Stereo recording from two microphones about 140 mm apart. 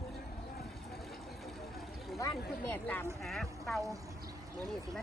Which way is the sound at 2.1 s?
25° left (ahead or behind).